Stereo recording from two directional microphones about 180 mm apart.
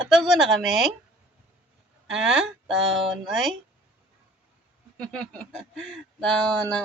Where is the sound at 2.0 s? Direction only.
5° right (ahead or behind).